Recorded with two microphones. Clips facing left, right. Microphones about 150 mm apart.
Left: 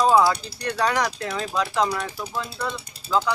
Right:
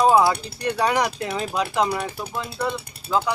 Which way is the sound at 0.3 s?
10° right (ahead or behind).